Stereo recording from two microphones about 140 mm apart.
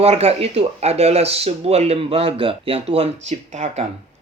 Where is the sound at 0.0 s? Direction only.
45° right (ahead or behind).